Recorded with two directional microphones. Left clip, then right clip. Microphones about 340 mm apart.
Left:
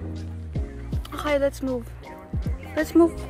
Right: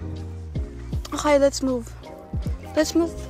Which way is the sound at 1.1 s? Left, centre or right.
Centre.